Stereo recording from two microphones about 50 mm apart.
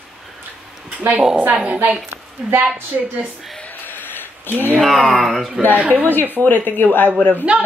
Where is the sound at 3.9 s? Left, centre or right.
Left.